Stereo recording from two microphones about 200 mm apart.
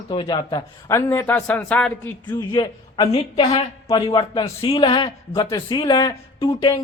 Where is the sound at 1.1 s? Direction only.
10° left (ahead or behind).